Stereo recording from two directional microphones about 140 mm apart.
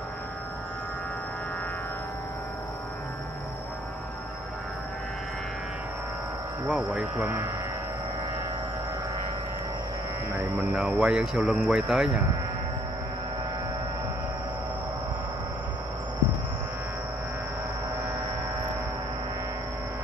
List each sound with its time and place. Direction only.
6.7 s speech: 5° right (ahead or behind)
10.6 s speech: 5° right (ahead or behind)